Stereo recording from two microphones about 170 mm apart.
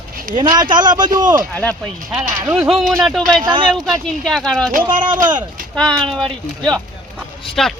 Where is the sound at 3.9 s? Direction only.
Centre (ahead or behind).